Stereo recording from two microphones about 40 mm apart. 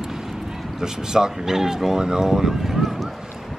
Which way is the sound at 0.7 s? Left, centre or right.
Centre.